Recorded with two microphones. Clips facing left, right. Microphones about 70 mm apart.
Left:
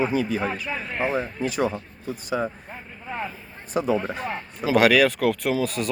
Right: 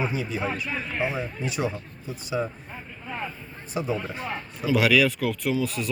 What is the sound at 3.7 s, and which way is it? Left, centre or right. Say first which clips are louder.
Speech: left 5 dB; left.